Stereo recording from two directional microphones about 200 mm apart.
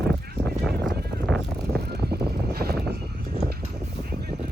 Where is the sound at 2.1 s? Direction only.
50° right (ahead or behind).